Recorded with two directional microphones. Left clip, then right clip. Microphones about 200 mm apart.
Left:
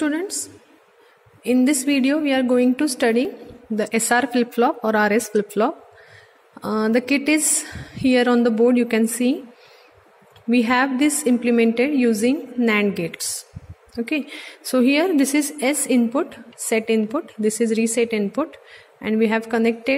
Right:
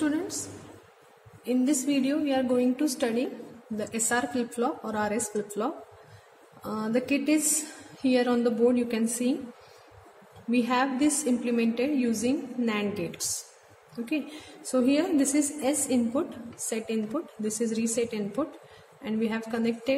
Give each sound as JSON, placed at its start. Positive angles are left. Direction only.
{"t": 1.4, "sound": "a woman's voice", "side_deg": 45}
{"t": 10.5, "sound": "a woman's voice", "side_deg": 40}